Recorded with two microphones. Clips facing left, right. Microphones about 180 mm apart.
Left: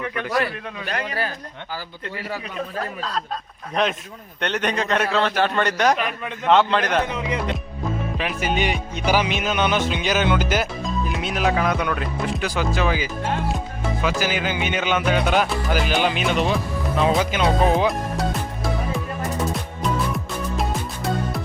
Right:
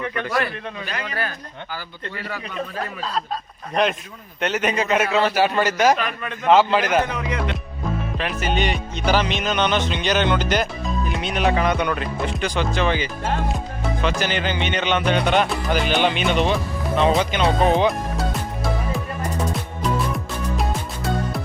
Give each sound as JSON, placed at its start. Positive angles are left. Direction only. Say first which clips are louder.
{"t": 0.0, "sound": "music", "louder": "even", "side_deg": 5}
{"t": 4.4, "sound": "music", "louder": "right 2 dB", "side_deg": -5}
{"t": 6.0, "sound": "music", "louder": "even", "side_deg": 15}
{"t": 6.5, "sound": "music", "louder": "right 2 dB", "side_deg": -5}
{"t": 7.1, "sound": "speech", "louder": "even", "side_deg": 25}
{"t": 8.2, "sound": "music", "louder": "even", "side_deg": 10}
{"t": 20.1, "sound": "music", "louder": "even", "side_deg": 0}